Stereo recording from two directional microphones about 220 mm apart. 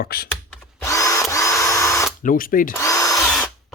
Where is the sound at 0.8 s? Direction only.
15° left (ahead or behind).